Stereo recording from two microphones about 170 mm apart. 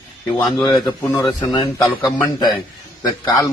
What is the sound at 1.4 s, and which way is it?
A man's voice, 20° left (ahead or behind).